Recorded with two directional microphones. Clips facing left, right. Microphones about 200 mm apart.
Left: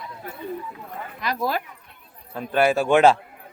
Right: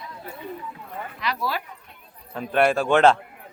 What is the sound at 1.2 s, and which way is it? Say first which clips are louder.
Speech: left 3 dB; 45° left (ahead or behind).